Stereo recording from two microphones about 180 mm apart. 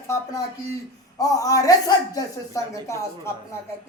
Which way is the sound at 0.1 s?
15° left (ahead or behind).